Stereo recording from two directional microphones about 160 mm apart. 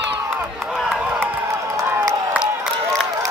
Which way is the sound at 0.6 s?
Centre (ahead or behind).